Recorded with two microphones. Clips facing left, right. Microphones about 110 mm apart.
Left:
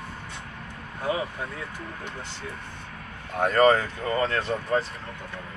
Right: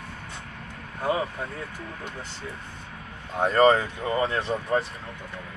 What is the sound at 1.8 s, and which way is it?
Speech, 30° right (ahead or behind).